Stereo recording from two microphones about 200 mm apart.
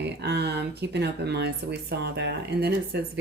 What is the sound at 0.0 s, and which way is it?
Speech, 55° right (ahead or behind).